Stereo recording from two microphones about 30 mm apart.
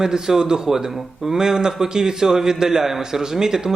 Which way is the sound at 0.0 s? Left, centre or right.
Centre.